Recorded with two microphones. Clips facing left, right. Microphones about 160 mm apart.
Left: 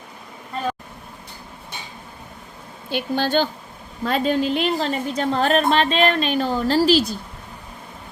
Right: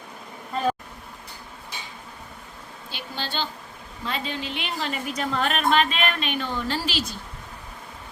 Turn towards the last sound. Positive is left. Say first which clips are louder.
# left 11 dB
turn(degrees=35)  # may be behind; listen again after turning